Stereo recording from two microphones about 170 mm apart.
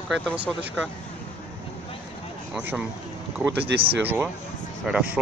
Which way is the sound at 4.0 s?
10° right (ahead or behind).